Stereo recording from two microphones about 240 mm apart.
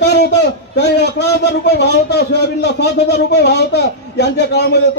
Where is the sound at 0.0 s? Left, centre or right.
Left.